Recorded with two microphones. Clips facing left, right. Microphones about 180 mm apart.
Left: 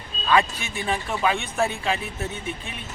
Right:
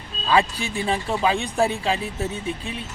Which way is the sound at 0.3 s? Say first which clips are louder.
Right 1 dB; 35° right (ahead or behind).